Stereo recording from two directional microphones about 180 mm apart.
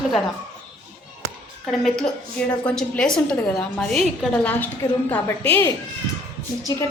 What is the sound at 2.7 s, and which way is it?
A woman's voice, 5° left (ahead or behind).